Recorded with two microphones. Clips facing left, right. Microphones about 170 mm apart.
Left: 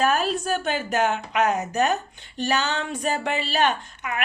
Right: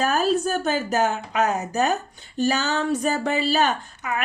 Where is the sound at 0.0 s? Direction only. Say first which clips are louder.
Right 2 dB; 40° right (ahead or behind).